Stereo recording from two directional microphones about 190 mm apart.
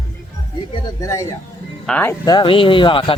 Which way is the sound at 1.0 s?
15° left (ahead or behind).